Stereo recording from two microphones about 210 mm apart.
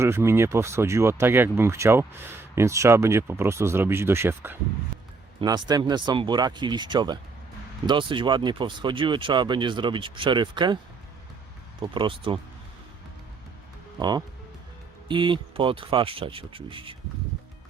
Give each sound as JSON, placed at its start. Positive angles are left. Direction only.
{"t": 0.0, "sound": "speech", "side_deg": -10}
{"t": 11.8, "sound": "speech", "side_deg": -25}
{"t": 14.0, "sound": "speech", "side_deg": -20}